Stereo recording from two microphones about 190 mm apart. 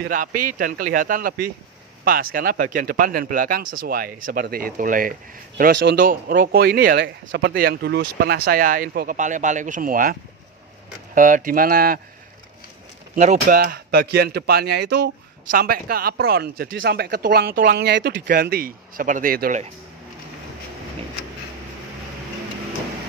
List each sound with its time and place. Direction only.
0.0 s speech: 50° right (ahead or behind)
5.7 s speech: 65° right (ahead or behind)
7.2 s speech: 65° right (ahead or behind); by 10.1 s 45° right (ahead or behind)
11.1 s speech: 45° right (ahead or behind)
13.1 s speech: 40° right (ahead or behind)